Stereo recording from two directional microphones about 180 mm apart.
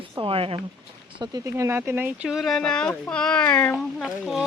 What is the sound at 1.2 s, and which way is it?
Speech, 20° right (ahead or behind).